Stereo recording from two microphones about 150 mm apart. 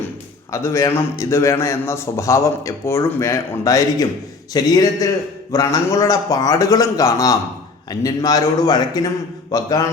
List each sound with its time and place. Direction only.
0.5 s a man's voice: 20° left (ahead or behind)